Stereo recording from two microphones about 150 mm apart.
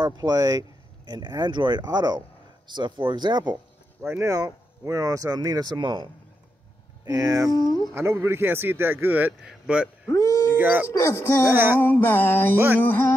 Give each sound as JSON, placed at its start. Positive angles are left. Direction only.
{"t": 0.0, "sound": "speech", "side_deg": -25}
{"t": 4.0, "sound": "speech", "side_deg": -15}
{"t": 7.1, "sound": "speech", "side_deg": -25}
{"t": 7.5, "sound": "speech", "side_deg": 25}
{"t": 7.9, "sound": "a man's voice", "side_deg": -15}
{"t": 10.9, "sound": "speech", "side_deg": 20}
{"t": 11.4, "sound": "a man's voice", "side_deg": -15}
{"t": 11.8, "sound": "music", "side_deg": 15}
{"t": 12.5, "sound": "a man's voice", "side_deg": -15}
{"t": 12.8, "sound": "music", "side_deg": 15}